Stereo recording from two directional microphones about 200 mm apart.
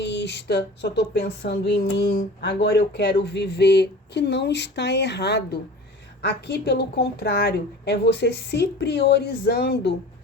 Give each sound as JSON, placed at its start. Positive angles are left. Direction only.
{"t": 0.0, "sound": "speech", "side_deg": 60}